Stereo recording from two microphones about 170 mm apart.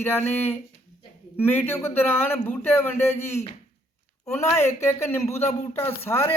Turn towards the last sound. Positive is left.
turn(degrees=15)  # may be behind; listen again after turning